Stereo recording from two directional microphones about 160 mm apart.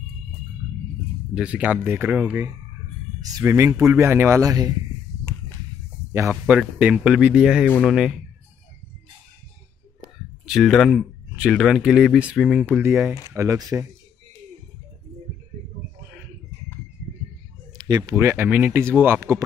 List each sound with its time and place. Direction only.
1.3 s speech: 5° right (ahead or behind)
3.2 s a sound: 25° right (ahead or behind)
3.4 s speech: 20° right (ahead or behind)
6.4 s speech: 5° right (ahead or behind)
10.4 s speech: centre (ahead or behind)
12.6 s speech: 15° right (ahead or behind)
17.7 s a sound: 25° right (ahead or behind)
18.1 s speech: 15° right (ahead or behind)